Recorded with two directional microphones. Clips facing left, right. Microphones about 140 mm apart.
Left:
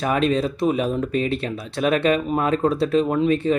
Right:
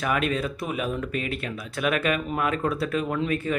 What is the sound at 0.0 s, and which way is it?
Speech, 30° left (ahead or behind).